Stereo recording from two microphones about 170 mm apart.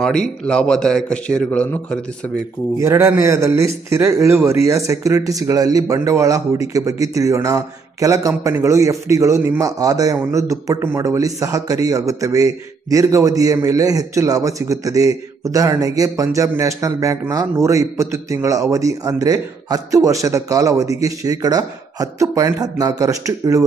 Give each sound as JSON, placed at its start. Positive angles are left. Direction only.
{"t": 0.0, "sound": "a man's voice", "side_deg": 5}
{"t": 2.3, "sound": "a man's voice", "side_deg": -15}